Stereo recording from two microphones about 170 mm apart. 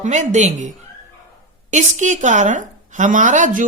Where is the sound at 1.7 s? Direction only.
45° right (ahead or behind).